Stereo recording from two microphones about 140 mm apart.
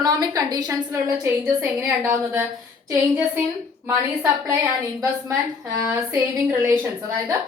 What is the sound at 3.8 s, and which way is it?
Speech, 25° right (ahead or behind).